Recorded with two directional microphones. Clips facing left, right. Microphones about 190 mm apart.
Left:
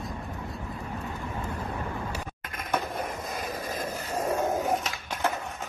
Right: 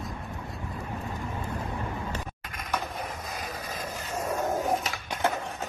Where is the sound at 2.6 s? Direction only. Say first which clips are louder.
Left 3 dB; 50° left (ahead or behind).